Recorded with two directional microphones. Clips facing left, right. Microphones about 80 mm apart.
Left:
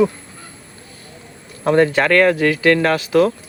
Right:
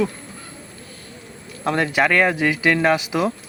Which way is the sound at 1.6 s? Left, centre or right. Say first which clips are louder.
Left 7 dB; centre.